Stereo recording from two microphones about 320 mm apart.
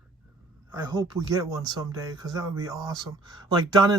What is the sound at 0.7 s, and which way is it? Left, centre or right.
Speech, centre.